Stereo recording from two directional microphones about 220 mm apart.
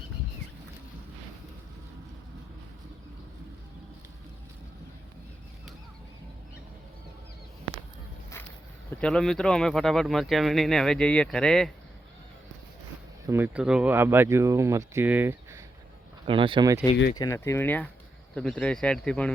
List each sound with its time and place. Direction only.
9.0 s speech: 5° left (ahead or behind)
13.2 s speech: 10° right (ahead or behind)
16.2 s speech: 25° right (ahead or behind)
17.2 s speech: 15° left (ahead or behind)